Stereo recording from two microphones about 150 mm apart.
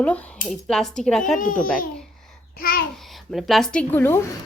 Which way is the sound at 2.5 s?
75° left (ahead or behind).